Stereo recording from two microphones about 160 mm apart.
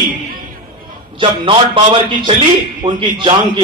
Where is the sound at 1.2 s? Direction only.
35° right (ahead or behind).